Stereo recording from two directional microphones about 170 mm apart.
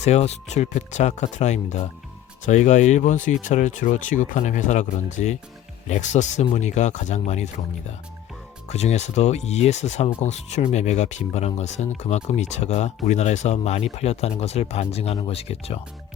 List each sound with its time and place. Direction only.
0.0 s speech: 40° left (ahead or behind)